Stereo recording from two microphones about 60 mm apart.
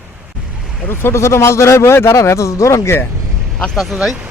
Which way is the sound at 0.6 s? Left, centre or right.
Centre.